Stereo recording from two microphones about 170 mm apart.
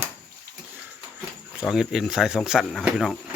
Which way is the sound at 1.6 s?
Centre (ahead or behind).